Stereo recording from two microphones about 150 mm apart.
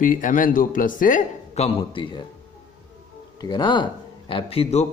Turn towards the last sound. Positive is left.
turn(degrees=45)  # may be behind; listen again after turning